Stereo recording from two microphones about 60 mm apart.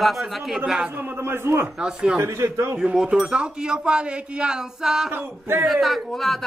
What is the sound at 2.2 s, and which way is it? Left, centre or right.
Speech, right.